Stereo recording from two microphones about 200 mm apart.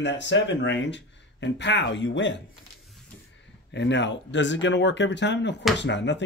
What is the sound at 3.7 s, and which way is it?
Speech, 60° left (ahead or behind).